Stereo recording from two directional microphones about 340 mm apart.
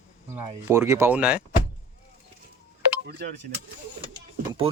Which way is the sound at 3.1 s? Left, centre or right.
Right.